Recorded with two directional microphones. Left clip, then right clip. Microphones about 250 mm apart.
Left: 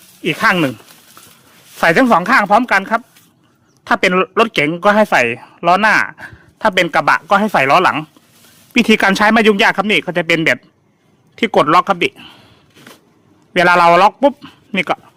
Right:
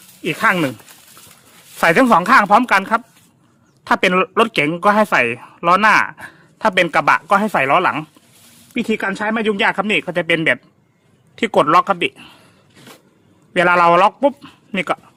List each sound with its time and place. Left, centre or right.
0.2 s a man's voice: centre
1.8 s speech: centre
8.7 s a man's voice: left; by 12.4 s centre
13.5 s a man's voice: centre